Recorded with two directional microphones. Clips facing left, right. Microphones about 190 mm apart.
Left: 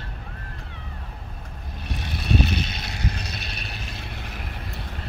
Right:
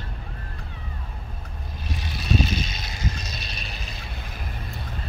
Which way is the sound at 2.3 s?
65° left (ahead or behind).